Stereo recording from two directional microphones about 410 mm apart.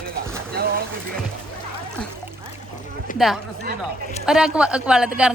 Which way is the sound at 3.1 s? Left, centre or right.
Centre.